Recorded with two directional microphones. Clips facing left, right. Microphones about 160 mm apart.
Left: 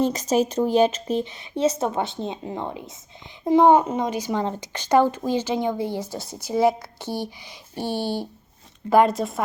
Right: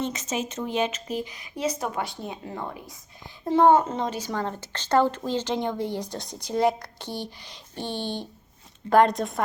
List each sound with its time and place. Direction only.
0.0 s speech: 35° left (ahead or behind); by 9.4 s centre (ahead or behind)